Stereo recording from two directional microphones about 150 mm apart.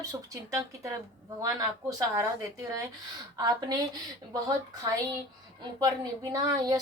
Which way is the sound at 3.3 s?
25° right (ahead or behind).